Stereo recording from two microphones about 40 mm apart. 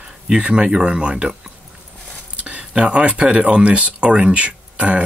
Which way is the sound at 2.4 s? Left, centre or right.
Right.